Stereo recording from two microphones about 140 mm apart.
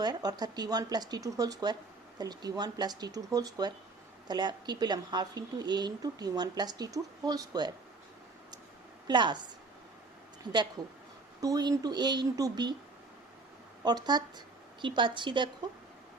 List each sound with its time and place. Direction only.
0.0 s speech: 30° right (ahead or behind)
9.0 s speech: 35° right (ahead or behind)
13.8 s speech: 30° right (ahead or behind)